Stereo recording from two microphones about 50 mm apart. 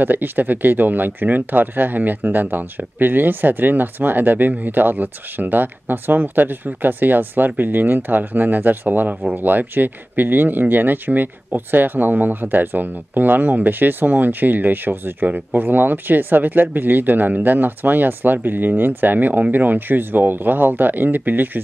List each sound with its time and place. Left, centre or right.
0.0 s speech: right